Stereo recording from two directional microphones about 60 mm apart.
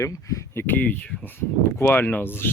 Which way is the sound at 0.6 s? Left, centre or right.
Left.